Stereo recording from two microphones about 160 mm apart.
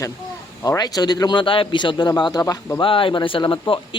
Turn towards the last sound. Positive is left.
turn(degrees=30)  # may be behind; listen again after turning